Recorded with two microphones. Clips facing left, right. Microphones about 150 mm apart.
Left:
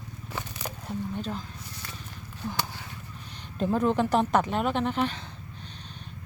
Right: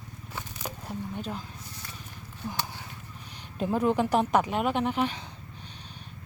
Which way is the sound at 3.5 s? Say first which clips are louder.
Left 1 dB; 10° right (ahead or behind).